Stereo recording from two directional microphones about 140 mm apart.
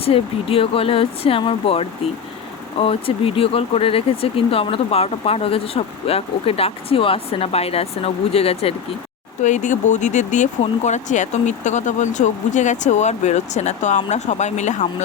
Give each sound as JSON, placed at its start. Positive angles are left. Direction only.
{"t": 0.0, "sound": "speech", "side_deg": 45}
{"t": 9.4, "sound": "speech", "side_deg": 60}